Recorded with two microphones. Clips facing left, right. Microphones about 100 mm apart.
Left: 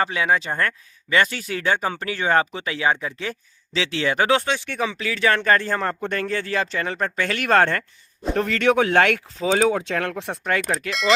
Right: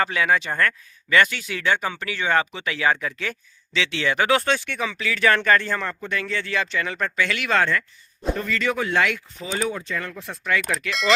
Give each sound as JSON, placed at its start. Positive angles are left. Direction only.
{"t": 0.0, "sound": "speech", "side_deg": 25}
{"t": 2.7, "sound": "speech", "side_deg": 25}
{"t": 8.4, "sound": "speech", "side_deg": 65}
{"t": 10.4, "sound": "speech", "side_deg": 40}